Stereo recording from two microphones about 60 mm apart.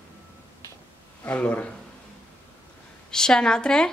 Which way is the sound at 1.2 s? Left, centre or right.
Left.